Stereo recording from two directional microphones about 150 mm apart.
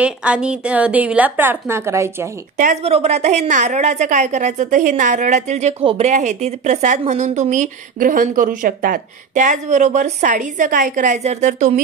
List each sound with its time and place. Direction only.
0.0 s a woman's voice: 10° right (ahead or behind)
2.5 s speech: 60° right (ahead or behind)
2.8 s a woman's voice: 45° right (ahead or behind)